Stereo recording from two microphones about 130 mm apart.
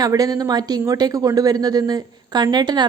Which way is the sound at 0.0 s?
30° right (ahead or behind).